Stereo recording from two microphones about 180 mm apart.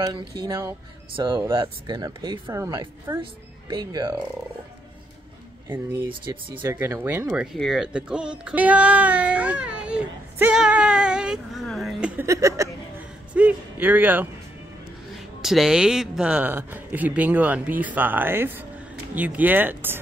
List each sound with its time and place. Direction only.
0.5 s speech: 15° right (ahead or behind)
6.3 s speech: 20° right (ahead or behind); by 12.1 s centre (ahead or behind)
12.2 s speech: 15° right (ahead or behind)
13.3 s a sound: 10° right (ahead or behind)
15.4 s speech: centre (ahead or behind)